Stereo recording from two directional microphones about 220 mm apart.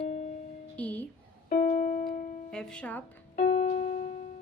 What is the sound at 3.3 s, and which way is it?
Music, 30° left (ahead or behind).